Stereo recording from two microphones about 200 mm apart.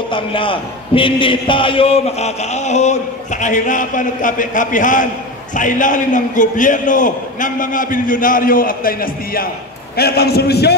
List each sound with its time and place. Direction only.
0.1 s a man's voice: 25° left (ahead or behind); by 10.7 s 55° left (ahead or behind)